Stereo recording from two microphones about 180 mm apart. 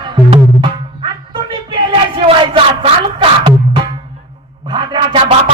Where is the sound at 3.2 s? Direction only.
30° right (ahead or behind).